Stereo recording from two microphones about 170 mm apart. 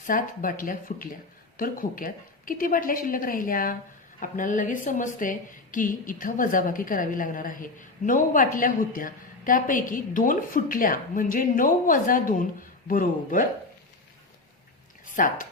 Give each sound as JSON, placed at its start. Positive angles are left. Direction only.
{"t": 0.0, "sound": "a woman's voice", "side_deg": 55}
{"t": 15.0, "sound": "a woman's voice", "side_deg": 50}